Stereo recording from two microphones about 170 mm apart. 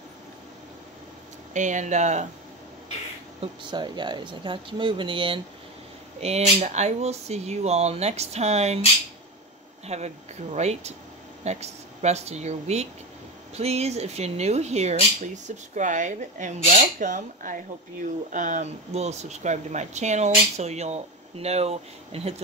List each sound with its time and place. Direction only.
1.5 s speech: 45° right (ahead or behind)
3.3 s speech: 25° right (ahead or behind)
9.8 s speech: 40° right (ahead or behind)